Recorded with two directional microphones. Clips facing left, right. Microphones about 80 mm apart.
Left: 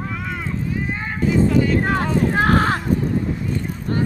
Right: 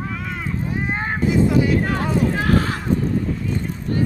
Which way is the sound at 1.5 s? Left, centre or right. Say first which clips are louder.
Even; centre.